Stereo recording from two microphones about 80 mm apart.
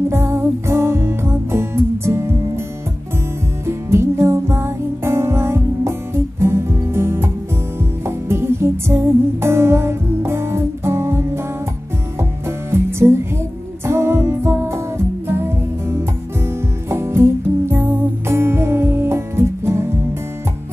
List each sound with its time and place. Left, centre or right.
0.1 s music: right
3.6 s music: right
16.4 s music: right